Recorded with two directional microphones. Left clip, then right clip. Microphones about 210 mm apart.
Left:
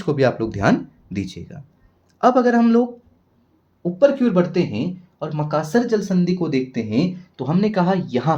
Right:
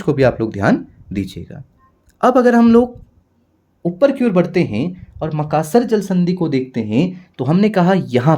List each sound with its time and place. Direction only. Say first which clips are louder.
0.0 s speech: right 4 dB; 30° right (ahead or behind)
3.8 s speech: right 2 dB; 55° right (ahead or behind)